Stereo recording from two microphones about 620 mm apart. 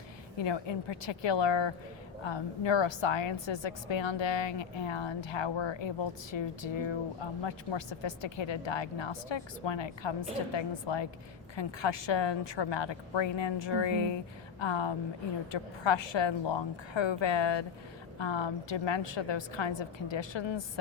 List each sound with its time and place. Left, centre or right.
0.4 s a woman's voice: left